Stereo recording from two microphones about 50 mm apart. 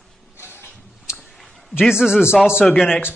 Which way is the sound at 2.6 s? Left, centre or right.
Centre.